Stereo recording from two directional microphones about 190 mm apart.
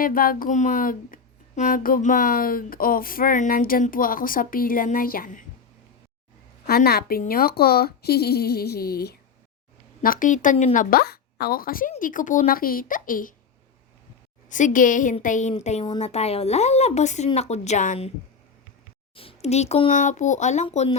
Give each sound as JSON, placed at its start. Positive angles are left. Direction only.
{"t": 0.0, "sound": "speech", "side_deg": 50}
{"t": 6.7, "sound": "speech", "side_deg": 55}
{"t": 14.5, "sound": "speech", "side_deg": 45}
{"t": 19.1, "sound": "speech", "side_deg": 30}